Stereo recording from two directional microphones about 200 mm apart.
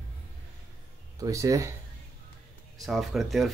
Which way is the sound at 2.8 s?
Centre (ahead or behind).